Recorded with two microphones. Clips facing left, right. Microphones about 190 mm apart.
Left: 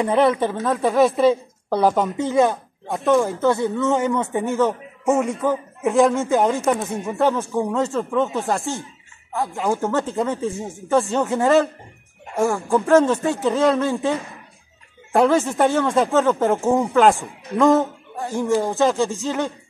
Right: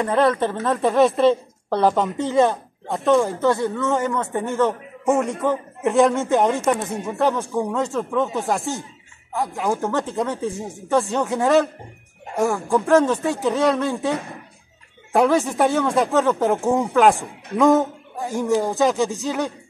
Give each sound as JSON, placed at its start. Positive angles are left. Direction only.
{"t": 0.0, "sound": "speech", "side_deg": 15}
{"t": 0.6, "sound": "a man's voice", "side_deg": 0}
{"t": 19.0, "sound": "speech", "side_deg": -15}